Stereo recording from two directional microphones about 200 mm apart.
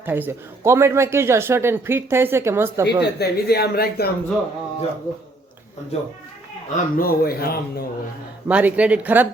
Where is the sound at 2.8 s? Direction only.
55° left (ahead or behind).